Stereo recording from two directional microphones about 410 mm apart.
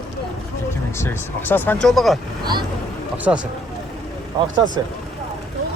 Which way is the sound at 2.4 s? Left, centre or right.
Centre.